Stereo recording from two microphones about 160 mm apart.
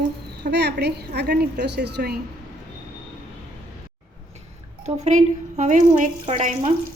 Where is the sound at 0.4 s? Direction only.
90° right.